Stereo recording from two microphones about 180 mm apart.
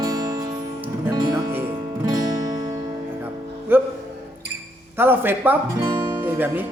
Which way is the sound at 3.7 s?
10° right (ahead or behind).